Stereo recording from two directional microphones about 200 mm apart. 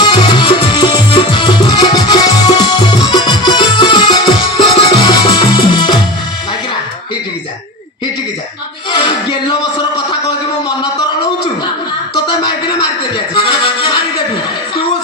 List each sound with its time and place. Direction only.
0.0 s music: 20° left (ahead or behind)
8.9 s music: 25° left (ahead or behind)
12.1 s a sound: 20° left (ahead or behind)
13.3 s music: 25° left (ahead or behind)